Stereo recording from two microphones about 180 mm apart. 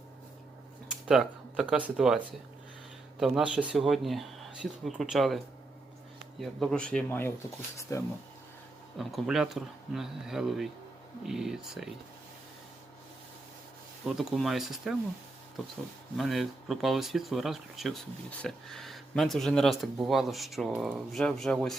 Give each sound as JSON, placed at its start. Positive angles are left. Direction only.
{"t": 1.0, "sound": "speech", "side_deg": -5}
{"t": 6.4, "sound": "speech", "side_deg": 0}
{"t": 9.0, "sound": "speech", "side_deg": 0}
{"t": 14.2, "sound": "speech", "side_deg": 0}
{"t": 16.1, "sound": "speech", "side_deg": 0}